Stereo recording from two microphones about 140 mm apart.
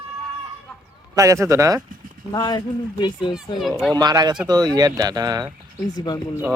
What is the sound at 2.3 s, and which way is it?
Speech, 30° left (ahead or behind).